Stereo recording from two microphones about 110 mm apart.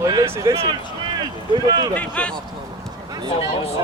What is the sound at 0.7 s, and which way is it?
Speech, 40° right (ahead or behind).